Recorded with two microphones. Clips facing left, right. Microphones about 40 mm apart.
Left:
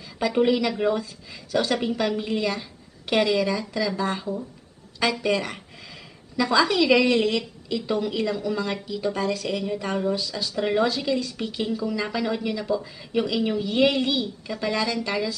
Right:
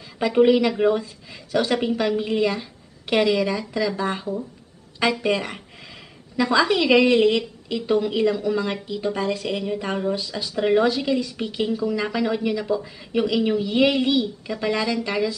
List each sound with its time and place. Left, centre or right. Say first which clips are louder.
0.2 s a woman's voice: right 4 dB; centre
10.5 s a woman's voice: right 4 dB; centre
12.6 s a woman's voice: right 2 dB; right